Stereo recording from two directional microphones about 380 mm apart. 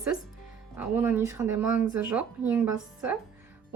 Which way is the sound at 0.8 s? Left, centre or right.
Centre.